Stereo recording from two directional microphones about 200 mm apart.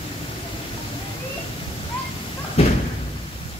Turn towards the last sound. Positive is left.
turn(degrees=30)  # may be behind; listen again after turning